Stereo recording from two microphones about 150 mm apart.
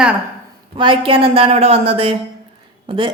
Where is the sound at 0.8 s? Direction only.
35° right (ahead or behind).